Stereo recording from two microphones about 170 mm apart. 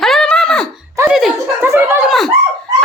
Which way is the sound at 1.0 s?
15° right (ahead or behind).